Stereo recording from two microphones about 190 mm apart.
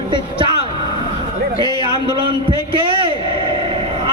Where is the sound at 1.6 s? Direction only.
25° right (ahead or behind).